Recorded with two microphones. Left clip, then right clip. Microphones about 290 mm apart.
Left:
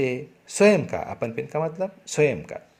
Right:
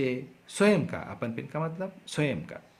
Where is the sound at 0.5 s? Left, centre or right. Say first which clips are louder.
Left 7 dB; centre.